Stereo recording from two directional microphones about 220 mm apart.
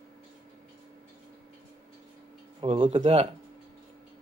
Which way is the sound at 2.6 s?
25° right (ahead or behind).